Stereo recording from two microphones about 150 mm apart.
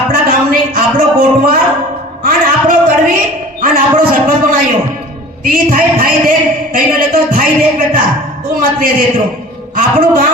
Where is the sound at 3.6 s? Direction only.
60° right (ahead or behind).